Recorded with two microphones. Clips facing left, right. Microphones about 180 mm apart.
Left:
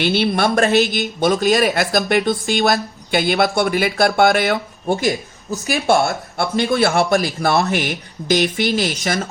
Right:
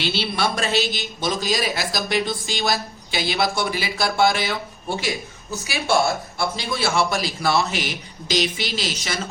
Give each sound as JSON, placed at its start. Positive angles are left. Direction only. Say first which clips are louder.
{"t": 0.0, "sound": "a man's voice", "louder": "left 7 dB", "side_deg": 55}